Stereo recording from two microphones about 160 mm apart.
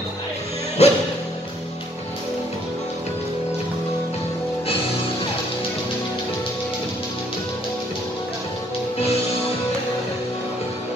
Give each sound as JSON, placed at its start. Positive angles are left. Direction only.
{"t": 0.8, "sound": "music", "side_deg": 40}